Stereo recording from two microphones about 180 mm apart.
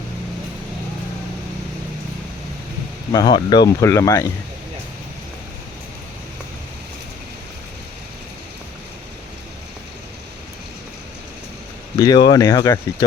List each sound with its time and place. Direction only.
3.1 s speech: 20° left (ahead or behind)
11.9 s speech: 25° left (ahead or behind)